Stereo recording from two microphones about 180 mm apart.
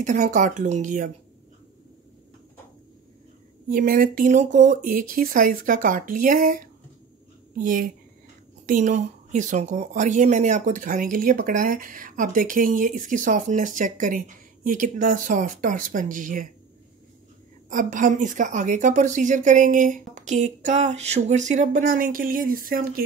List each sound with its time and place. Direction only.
0.0 s speech: 45° right (ahead or behind)
3.6 s speech: 50° right (ahead or behind)
17.6 s speech: 45° right (ahead or behind)